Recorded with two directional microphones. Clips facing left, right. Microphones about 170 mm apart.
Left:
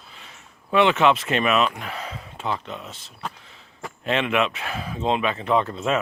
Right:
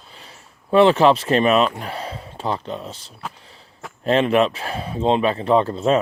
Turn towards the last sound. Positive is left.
turn(degrees=-35)  # may be behind; listen again after turning